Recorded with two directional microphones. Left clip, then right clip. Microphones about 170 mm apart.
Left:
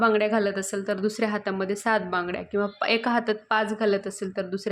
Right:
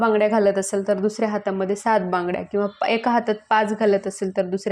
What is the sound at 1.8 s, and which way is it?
A woman's voice, 20° right (ahead or behind).